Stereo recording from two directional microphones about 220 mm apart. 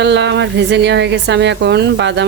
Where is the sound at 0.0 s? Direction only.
50° right (ahead or behind).